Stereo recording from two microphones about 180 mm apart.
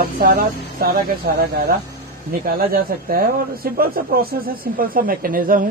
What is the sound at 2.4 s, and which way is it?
Speech, 55° right (ahead or behind).